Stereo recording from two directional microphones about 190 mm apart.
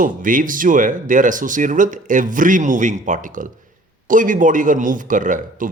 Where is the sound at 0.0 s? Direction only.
45° right (ahead or behind).